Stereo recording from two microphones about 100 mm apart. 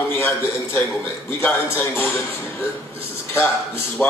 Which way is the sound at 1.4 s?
20° left (ahead or behind).